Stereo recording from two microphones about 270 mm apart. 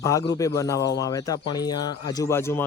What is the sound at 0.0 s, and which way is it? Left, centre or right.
Speech, centre.